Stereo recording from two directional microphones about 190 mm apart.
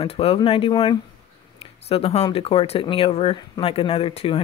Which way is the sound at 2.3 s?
30° left (ahead or behind).